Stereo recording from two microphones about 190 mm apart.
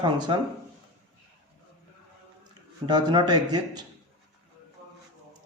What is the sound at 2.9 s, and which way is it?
Speech, 20° right (ahead or behind).